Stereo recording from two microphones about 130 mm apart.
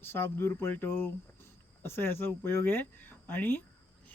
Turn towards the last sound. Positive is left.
turn(degrees=15)  # may be behind; listen again after turning